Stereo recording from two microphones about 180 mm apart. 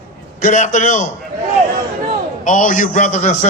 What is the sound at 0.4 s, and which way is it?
Speech, 45° left (ahead or behind).